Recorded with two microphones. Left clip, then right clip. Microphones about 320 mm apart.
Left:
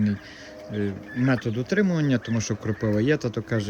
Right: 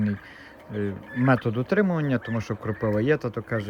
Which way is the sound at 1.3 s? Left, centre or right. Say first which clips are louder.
Right 3 dB; centre.